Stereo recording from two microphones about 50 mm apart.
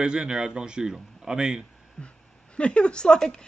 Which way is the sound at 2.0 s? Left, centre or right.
Left.